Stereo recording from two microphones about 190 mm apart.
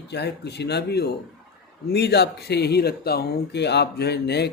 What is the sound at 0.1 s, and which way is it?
Speech, 60° left (ahead or behind).